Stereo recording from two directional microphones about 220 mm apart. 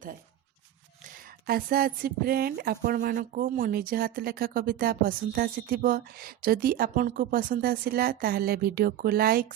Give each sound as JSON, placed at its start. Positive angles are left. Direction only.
{"t": 1.0, "sound": "speech", "side_deg": -40}